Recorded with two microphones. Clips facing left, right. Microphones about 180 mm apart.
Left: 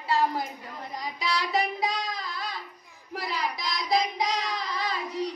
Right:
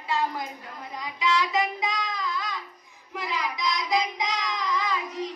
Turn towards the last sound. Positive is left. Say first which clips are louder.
# right 3 dB
turn(degrees=35)  # may be behind; listen again after turning